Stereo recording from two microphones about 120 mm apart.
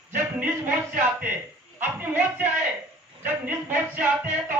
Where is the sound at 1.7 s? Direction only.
20° right (ahead or behind).